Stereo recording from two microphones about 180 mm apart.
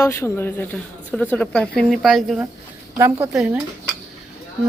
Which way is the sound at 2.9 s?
15° right (ahead or behind).